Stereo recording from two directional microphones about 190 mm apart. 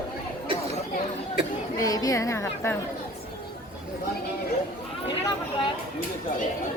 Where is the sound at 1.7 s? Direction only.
20° left (ahead or behind).